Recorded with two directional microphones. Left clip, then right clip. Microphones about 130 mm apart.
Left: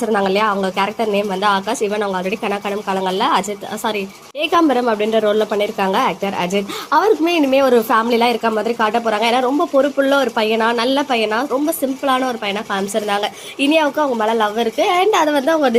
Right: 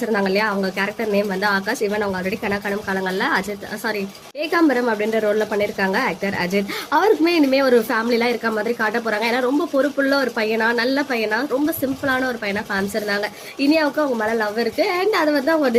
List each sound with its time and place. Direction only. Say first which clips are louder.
0.1 s speech: left 4 dB; 15° left (ahead or behind)
6.9 s a woman's voice: left 2 dB; centre (ahead or behind); by 15.7 s 25° left (ahead or behind)